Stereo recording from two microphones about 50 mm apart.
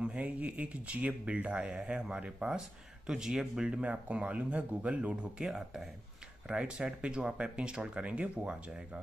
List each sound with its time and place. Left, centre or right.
0.0 s speech: right